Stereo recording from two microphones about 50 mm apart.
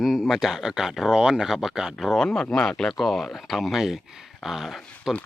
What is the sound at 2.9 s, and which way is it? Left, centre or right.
Speech, centre.